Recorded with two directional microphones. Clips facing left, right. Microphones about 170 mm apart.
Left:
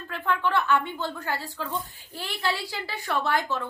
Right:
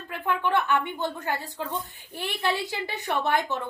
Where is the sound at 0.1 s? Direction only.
15° right (ahead or behind).